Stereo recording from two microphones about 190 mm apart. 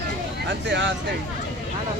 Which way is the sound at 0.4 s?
70° right (ahead or behind).